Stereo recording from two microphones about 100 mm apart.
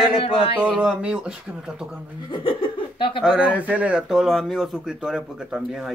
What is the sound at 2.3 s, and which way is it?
Speech, 60° left (ahead or behind).